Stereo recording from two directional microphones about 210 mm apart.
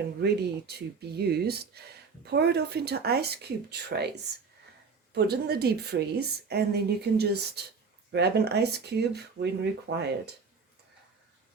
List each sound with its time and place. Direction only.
0.2 s a woman's voice: 50° right (ahead or behind)